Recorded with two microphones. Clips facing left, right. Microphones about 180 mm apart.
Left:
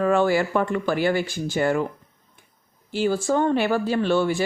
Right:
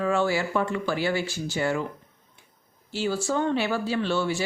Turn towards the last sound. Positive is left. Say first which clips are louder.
# left 5 dB
turn(degrees=50)  # may be behind; listen again after turning